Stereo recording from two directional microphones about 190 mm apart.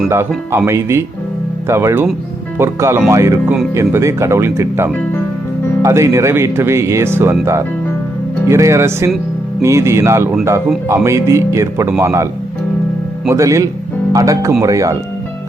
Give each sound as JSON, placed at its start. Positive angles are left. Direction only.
{"t": 0.1, "sound": "speech", "side_deg": -15}
{"t": 8.4, "sound": "speech", "side_deg": -15}